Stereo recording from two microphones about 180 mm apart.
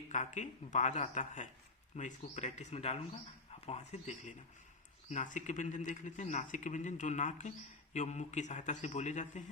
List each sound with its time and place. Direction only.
0.1 s a man's voice: 40° left (ahead or behind)